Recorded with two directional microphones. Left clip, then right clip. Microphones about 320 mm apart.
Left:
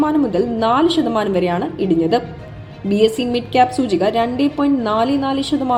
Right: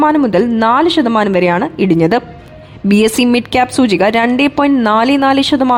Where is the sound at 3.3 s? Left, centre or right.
Right.